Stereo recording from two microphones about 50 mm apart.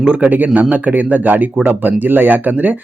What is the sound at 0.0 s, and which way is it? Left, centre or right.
Speech, right.